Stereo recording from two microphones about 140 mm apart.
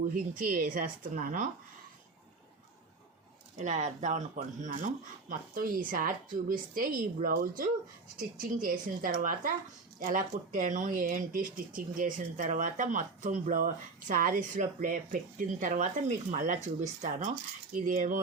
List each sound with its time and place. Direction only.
0.1 s speech: 85° right
3.6 s speech: 55° right (ahead or behind)
5.3 s a woman's voice: 85° right